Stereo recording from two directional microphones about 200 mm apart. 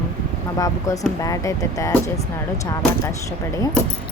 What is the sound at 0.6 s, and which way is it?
Speech, 15° left (ahead or behind).